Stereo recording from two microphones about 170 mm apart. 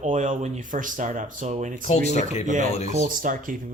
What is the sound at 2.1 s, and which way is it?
Speech, 40° left (ahead or behind).